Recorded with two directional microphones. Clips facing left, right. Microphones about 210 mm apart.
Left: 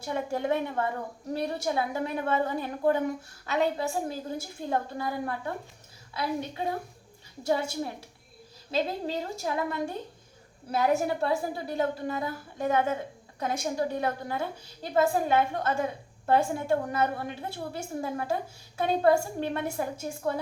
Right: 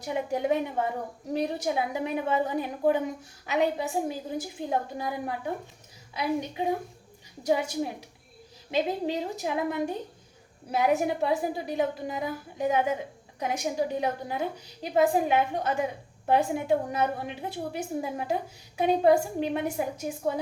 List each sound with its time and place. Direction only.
0.0 s a woman's voice: 15° right (ahead or behind)